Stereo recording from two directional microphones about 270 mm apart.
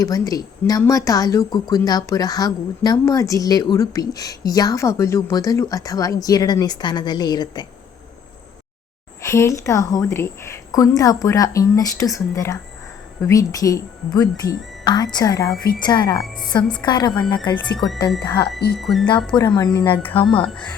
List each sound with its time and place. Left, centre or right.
0.0 s speech: centre
9.2 s a woman's voice: centre
16.8 s speech: centre
18.8 s a woman's voice: centre
19.5 s speech: centre